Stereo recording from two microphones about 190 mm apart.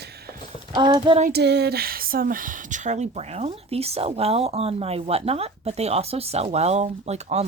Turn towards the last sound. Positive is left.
turn(degrees=-35)  # may be behind; listen again after turning